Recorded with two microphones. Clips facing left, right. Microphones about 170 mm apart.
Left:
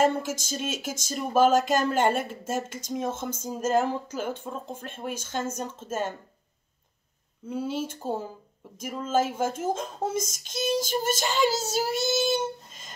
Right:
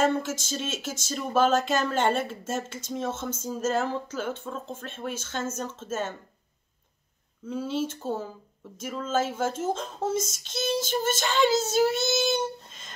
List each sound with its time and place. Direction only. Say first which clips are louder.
0.0 s speech: left 1 dB; 10° left (ahead or behind)
7.4 s speech: right 1 dB; 10° left (ahead or behind)
10.1 s child singing: right 1 dB; 50° left (ahead or behind)
10.4 s speech: left 1 dB; 10° left (ahead or behind)
10.7 s child singing: left 1 dB; 50° left (ahead or behind)
11.1 s speech: right 3 dB; 10° left (ahead or behind)